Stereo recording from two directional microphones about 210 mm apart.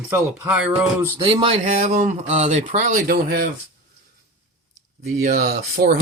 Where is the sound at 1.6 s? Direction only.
40° right (ahead or behind).